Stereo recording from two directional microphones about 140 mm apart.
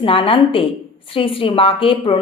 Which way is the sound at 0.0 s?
40° left (ahead or behind).